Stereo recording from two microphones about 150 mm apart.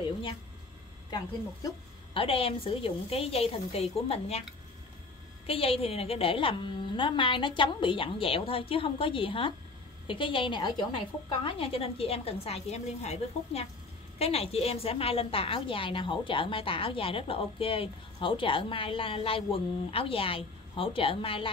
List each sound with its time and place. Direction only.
2.1 s a woman's voice: 40° left (ahead or behind)
5.5 s a woman's voice: 40° left (ahead or behind)